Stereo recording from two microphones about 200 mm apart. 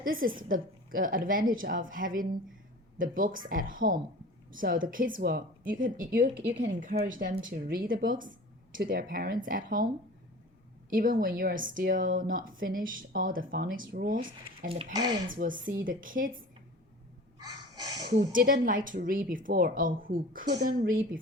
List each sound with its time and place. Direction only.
0.0 s a woman's voice: 45° right (ahead or behind)
14.7 s speech: 30° right (ahead or behind)
15.3 s a woman's voice: 40° right (ahead or behind)
18.1 s a woman's voice: 40° right (ahead or behind)